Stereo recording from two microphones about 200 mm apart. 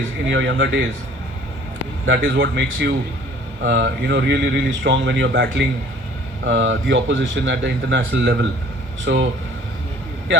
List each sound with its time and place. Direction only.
0.3 s speech: 65° right (ahead or behind)
2.0 s speech: 60° right (ahead or behind)
6.4 s a man's voice: 70° right (ahead or behind)